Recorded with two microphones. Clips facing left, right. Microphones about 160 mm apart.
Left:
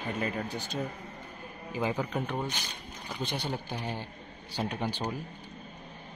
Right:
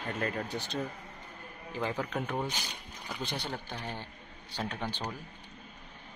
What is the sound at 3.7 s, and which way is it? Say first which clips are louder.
Speech: left 4 dB; 15° left (ahead or behind).